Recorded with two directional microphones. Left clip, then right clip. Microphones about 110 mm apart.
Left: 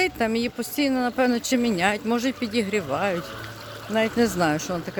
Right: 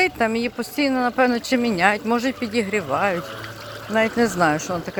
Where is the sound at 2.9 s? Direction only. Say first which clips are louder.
Right 5 dB; 70° left (ahead or behind).